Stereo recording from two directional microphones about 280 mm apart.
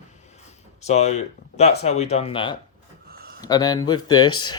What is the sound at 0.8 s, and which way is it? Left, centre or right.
Speech, left.